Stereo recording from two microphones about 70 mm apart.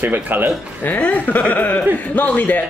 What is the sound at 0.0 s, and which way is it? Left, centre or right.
Speech, right.